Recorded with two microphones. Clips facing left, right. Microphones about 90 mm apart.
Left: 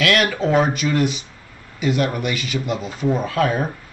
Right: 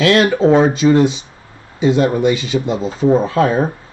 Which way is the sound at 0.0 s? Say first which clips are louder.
Right 7 dB; 30° right (ahead or behind).